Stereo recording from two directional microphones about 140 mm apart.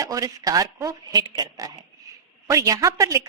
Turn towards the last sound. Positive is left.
turn(degrees=-25)  # may be behind; listen again after turning